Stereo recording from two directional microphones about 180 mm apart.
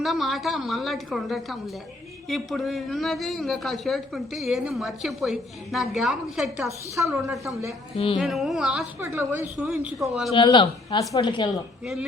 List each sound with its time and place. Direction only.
0.0 s a man's voice: centre (ahead or behind)
7.9 s carnatic music: 30° left (ahead or behind)
8.2 s a man's voice: centre (ahead or behind)
10.3 s speech: 25° left (ahead or behind)